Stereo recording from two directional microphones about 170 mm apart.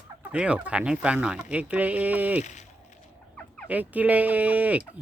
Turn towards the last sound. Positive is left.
turn(degrees=-10)  # may be behind; listen again after turning